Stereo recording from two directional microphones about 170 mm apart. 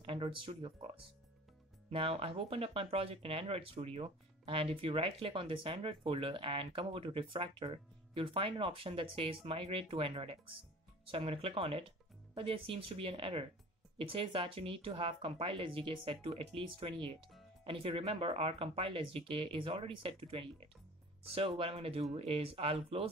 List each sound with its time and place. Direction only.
0.0 s speech: 30° right (ahead or behind)
1.9 s speech: 35° right (ahead or behind)